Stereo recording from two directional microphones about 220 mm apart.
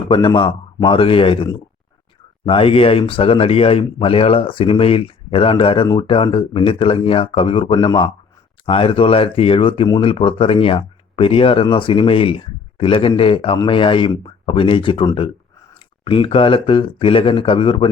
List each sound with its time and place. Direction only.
0.1 s speech: 20° left (ahead or behind)